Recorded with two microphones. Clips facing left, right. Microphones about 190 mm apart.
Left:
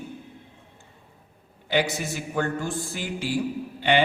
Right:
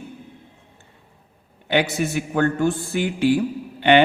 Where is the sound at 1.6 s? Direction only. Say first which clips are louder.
Right 4 dB; 65° right (ahead or behind).